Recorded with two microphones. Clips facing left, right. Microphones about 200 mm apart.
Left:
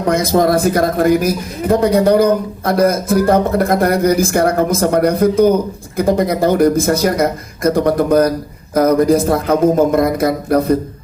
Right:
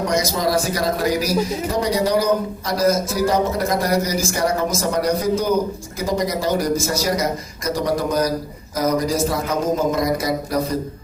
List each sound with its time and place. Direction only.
0.0 s a man's voice: 55° left (ahead or behind)